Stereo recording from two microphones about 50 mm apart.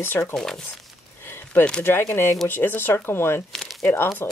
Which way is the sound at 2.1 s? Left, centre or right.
Left.